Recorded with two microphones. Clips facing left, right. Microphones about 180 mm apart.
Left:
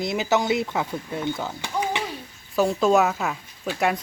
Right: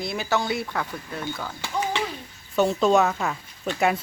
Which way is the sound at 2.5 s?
Centre (ahead or behind).